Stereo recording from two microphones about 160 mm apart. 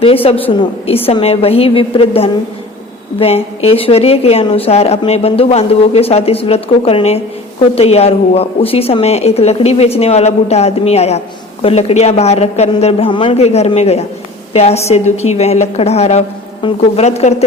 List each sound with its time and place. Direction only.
0.0 s a woman's voice: 35° left (ahead or behind)